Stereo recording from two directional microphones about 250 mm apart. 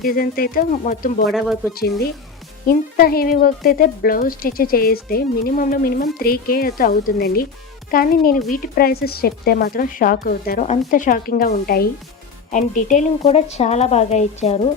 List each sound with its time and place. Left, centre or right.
0.0 s speech: left
1.2 s speech: centre
1.7 s a woman's voice: left